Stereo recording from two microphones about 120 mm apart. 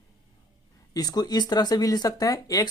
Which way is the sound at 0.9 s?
35° left (ahead or behind).